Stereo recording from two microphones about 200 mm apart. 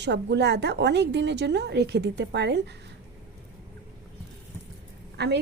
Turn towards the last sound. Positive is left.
turn(degrees=-55)  # may be behind; listen again after turning